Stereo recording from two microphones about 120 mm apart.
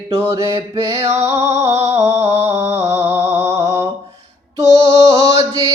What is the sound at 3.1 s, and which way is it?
Music, 20° right (ahead or behind).